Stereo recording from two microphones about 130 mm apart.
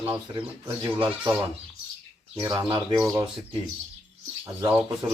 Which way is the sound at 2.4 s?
30° right (ahead or behind).